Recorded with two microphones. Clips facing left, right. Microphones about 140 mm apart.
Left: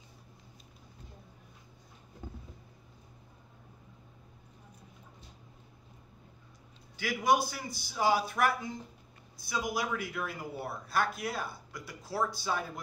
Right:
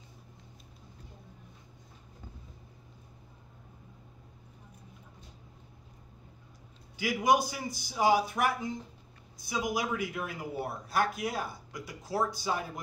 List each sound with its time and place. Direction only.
7.0 s speech: 15° right (ahead or behind)